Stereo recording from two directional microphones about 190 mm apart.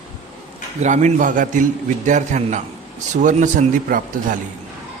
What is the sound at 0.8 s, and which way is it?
A man's voice, 40° right (ahead or behind).